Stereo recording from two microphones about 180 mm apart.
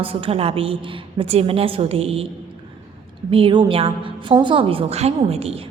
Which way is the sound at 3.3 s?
30° right (ahead or behind).